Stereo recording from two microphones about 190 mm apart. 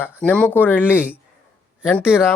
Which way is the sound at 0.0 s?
5° left (ahead or behind).